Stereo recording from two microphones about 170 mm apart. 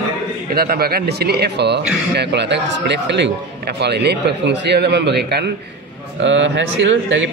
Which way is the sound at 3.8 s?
80° right.